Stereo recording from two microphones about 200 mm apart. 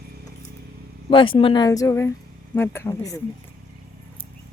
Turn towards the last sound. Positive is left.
turn(degrees=15)  # may be behind; listen again after turning